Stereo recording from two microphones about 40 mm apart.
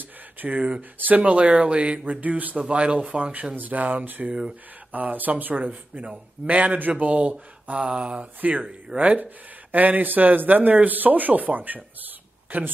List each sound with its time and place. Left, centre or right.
0.4 s speech: right
2.7 s speech: right
3.5 s speech: right
8.4 s speech: right
9.2 s speech: right